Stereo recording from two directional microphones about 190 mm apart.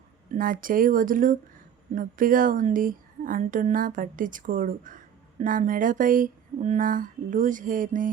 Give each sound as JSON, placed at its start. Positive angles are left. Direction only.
{"t": 0.3, "sound": "speech", "side_deg": -45}